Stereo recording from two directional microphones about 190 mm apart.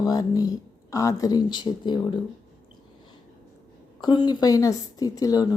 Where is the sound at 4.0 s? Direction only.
25° left (ahead or behind).